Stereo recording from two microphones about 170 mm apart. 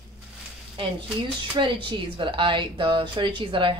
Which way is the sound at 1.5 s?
30° right (ahead or behind).